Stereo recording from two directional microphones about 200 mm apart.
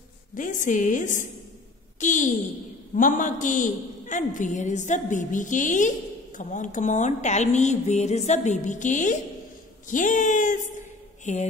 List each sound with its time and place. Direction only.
0.3 s a woman's voice: 40° left (ahead or behind)